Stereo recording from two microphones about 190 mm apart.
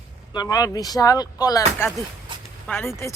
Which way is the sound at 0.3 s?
20° left (ahead or behind).